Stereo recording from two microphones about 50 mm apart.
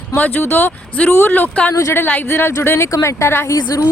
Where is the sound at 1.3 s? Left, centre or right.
Left.